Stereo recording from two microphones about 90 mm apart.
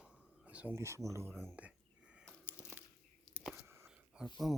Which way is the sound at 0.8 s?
35° right (ahead or behind).